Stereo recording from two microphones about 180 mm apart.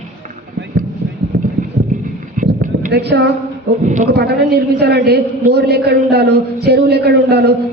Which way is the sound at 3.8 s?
45° right (ahead or behind).